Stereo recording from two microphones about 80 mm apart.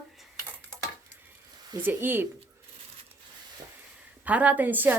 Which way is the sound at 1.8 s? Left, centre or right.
Right.